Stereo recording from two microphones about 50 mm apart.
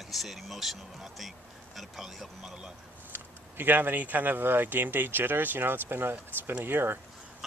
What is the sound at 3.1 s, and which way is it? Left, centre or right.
Speech, right.